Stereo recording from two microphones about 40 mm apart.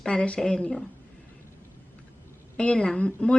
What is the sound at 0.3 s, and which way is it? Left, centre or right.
Speech, centre.